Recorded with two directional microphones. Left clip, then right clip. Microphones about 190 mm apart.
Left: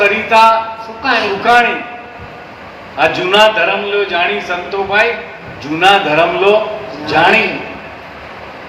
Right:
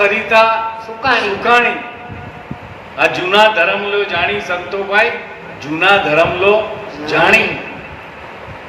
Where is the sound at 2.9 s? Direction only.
55° right (ahead or behind).